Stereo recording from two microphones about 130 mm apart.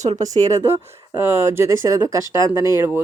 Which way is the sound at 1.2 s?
20° right (ahead or behind).